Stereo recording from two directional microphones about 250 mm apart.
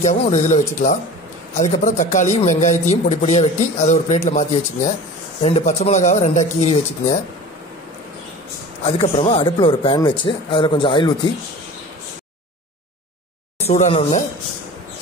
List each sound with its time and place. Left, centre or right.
0.0 s speech: left
8.8 s speech: left
13.7 s speech: left